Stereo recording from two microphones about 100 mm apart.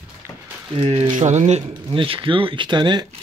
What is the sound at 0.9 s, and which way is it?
Speech, 90° right.